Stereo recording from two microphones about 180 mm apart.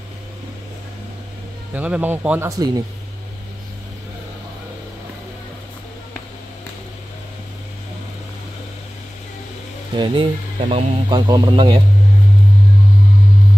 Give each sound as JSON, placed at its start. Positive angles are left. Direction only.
{"t": 1.7, "sound": "a man's voice", "side_deg": -10}
{"t": 2.5, "sound": "speech", "side_deg": -20}
{"t": 9.9, "sound": "speech", "side_deg": -25}